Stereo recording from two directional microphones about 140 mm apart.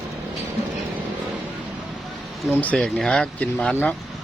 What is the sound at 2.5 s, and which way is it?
Speech, 10° left (ahead or behind).